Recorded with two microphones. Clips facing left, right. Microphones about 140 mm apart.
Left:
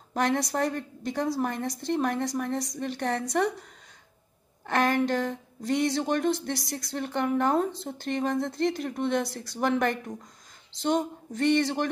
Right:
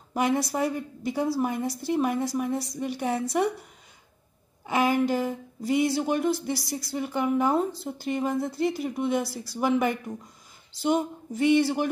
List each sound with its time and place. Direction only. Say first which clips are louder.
0.1 s a woman's voice: right 1 dB; 5° right (ahead or behind)
4.6 s a woman's voice: right 1 dB; 5° right (ahead or behind)